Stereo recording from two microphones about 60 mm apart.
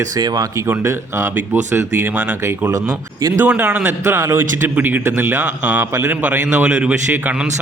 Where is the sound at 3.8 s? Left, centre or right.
Right.